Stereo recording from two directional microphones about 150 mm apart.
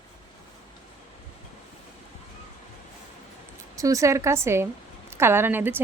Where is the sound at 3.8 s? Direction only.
20° right (ahead or behind).